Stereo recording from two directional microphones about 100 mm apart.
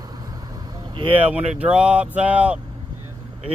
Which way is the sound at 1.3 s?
10° right (ahead or behind).